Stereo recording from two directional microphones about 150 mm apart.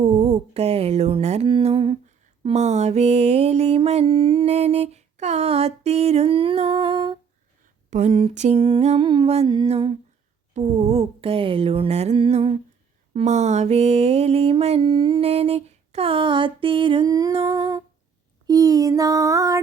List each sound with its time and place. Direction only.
0.0 s mantra: 45° right (ahead or behind)
1.5 s mantra: 35° right (ahead or behind)
2.4 s mantra: 50° right (ahead or behind)
7.9 s mantra: 55° right (ahead or behind)
9.0 s mantra: 30° right (ahead or behind)
13.1 s mantra: 50° right (ahead or behind); by 17.8 s 25° right (ahead or behind)
18.4 s a sound: 25° right (ahead or behind)